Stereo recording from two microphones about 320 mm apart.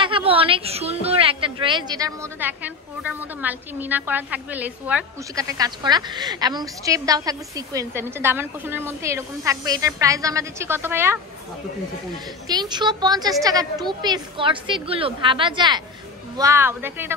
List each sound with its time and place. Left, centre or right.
0.0 s a woman's voice: centre
12.4 s a woman's voice: centre